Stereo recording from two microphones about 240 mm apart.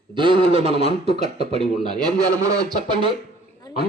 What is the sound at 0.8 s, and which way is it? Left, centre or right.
Speech, left.